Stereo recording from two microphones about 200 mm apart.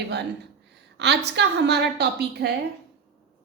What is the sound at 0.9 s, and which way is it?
A woman's voice, 55° right (ahead or behind).